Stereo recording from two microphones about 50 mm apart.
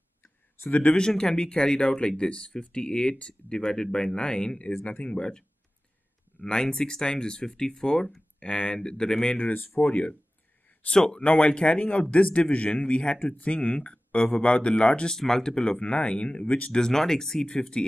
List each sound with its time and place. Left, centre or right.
0.7 s speech: left
0.9 s speech: centre
4.8 s a man's voice: left
6.4 s speech: centre
9.4 s speech: left
9.8 s a man's voice: left
10.9 s a man's voice: centre
15.1 s speech: centre
15.7 s a man's voice: left
16.7 s speech: centre